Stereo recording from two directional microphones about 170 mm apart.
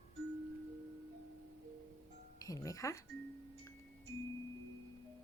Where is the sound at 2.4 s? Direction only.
20° left (ahead or behind).